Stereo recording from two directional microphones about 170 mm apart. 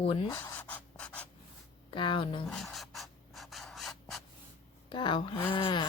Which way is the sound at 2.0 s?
30° left (ahead or behind).